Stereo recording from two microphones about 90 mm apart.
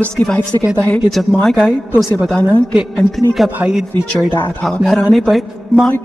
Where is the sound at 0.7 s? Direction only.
15° left (ahead or behind).